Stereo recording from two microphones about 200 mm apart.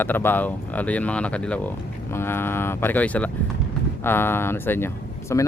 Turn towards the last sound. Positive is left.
turn(degrees=15)  # may be behind; listen again after turning